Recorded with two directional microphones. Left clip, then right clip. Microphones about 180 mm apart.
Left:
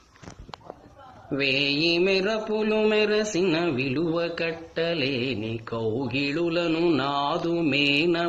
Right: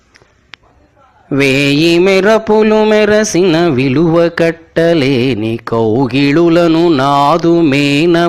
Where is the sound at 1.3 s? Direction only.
40° right (ahead or behind).